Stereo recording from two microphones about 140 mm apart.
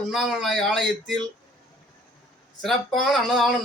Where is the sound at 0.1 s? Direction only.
Centre (ahead or behind).